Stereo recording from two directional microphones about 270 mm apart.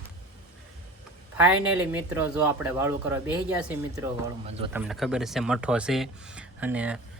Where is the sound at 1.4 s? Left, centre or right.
Centre.